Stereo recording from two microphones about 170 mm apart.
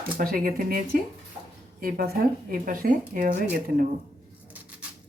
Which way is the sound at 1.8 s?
60° right (ahead or behind).